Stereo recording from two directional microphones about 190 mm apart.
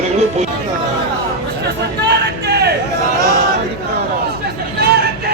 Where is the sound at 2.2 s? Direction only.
60° right (ahead or behind).